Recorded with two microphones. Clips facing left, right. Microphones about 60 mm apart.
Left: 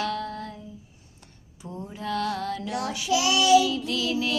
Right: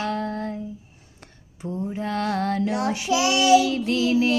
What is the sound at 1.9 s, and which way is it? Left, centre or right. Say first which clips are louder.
Child singing: right 1 dB; right.